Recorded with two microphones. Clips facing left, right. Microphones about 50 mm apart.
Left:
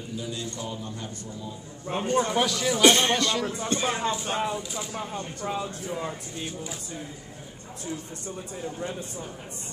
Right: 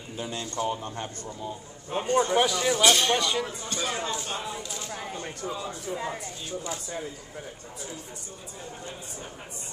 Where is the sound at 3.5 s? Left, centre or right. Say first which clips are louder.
Left 4 dB; left.